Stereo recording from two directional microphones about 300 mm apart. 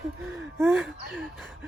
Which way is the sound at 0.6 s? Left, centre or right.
Centre.